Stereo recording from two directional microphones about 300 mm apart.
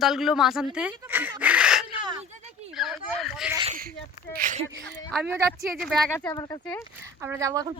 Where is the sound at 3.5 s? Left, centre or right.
Right.